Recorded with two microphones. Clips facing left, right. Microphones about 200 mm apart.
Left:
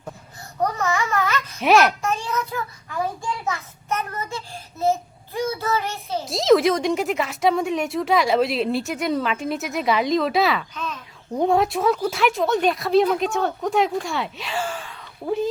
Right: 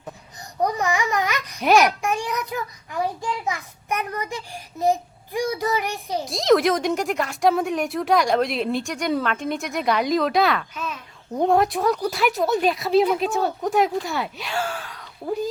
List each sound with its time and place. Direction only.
0.6 s speech: 15° right (ahead or behind)
1.8 s a sound: 15° right (ahead or behind)
3.4 s a child's voice: 15° right (ahead or behind)
6.2 s a woman's voice: centre (ahead or behind)